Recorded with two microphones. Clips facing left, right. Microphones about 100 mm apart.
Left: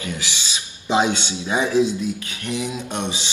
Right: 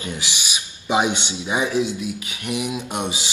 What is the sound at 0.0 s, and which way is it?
A man's voice, 20° right (ahead or behind).